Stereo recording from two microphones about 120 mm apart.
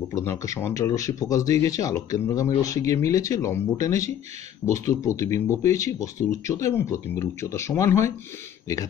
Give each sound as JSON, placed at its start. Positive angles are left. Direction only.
{"t": 0.1, "sound": "speech", "side_deg": 25}